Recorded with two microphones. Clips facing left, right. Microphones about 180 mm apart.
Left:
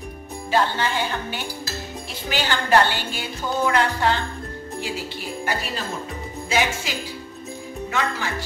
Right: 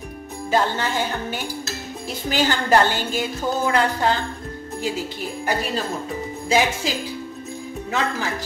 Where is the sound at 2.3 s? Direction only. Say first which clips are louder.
Right 1 dB; 45° right (ahead or behind).